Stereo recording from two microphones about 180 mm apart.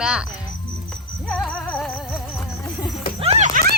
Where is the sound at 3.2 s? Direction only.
40° right (ahead or behind).